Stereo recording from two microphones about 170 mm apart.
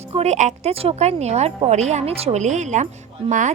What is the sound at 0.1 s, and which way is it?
A woman's voice, 40° right (ahead or behind).